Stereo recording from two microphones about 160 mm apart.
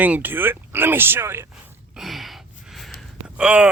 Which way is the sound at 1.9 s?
Centre (ahead or behind).